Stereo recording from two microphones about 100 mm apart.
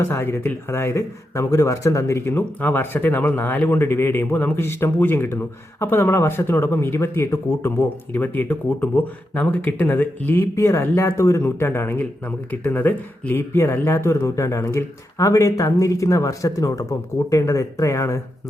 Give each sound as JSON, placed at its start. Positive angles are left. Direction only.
{"t": 0.0, "sound": "speech", "side_deg": 25}